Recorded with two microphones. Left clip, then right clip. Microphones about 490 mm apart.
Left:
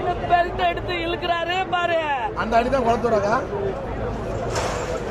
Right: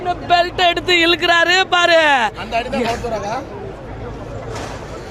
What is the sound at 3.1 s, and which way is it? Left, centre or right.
Speech, right.